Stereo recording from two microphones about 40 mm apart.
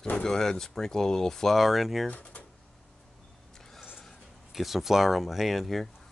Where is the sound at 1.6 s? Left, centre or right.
Centre.